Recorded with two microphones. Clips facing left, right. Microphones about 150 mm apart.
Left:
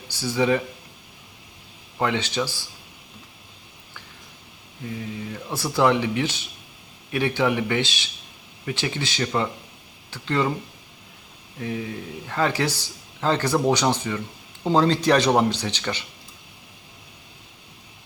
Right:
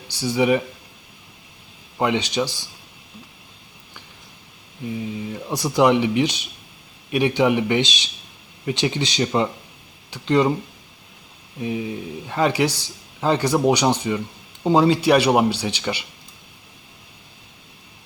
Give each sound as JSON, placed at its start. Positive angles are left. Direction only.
{"t": 0.1, "sound": "speech", "side_deg": -15}
{"t": 2.0, "sound": "speech", "side_deg": -15}
{"t": 4.9, "sound": "speech", "side_deg": -15}
{"t": 11.6, "sound": "speech", "side_deg": -15}